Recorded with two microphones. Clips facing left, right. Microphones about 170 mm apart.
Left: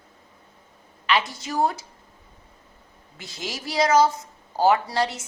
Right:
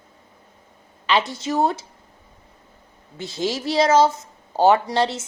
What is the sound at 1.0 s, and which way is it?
Speech, 25° right (ahead or behind).